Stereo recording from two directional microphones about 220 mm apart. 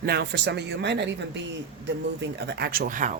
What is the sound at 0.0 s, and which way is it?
Speech, 45° right (ahead or behind).